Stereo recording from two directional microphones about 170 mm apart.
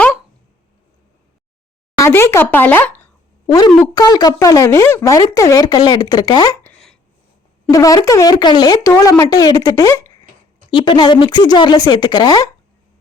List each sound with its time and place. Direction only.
2.0 s speech: 15° left (ahead or behind)
3.9 s speech: 25° left (ahead or behind)
7.7 s speech: 20° left (ahead or behind)